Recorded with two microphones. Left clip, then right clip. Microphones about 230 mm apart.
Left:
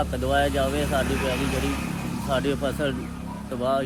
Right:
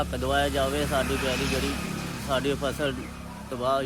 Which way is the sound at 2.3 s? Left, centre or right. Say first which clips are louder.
Left 1 dB; centre.